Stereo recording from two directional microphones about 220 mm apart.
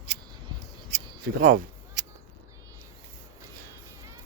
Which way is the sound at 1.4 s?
35° right (ahead or behind).